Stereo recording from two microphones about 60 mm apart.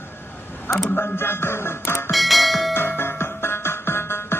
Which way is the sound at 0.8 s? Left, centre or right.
Left.